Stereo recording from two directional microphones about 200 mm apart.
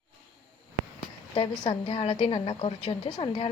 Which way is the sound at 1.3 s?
30° left (ahead or behind).